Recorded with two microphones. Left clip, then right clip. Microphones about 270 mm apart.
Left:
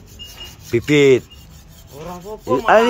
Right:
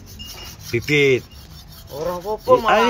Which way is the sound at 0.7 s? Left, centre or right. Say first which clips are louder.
Left 4 dB; left.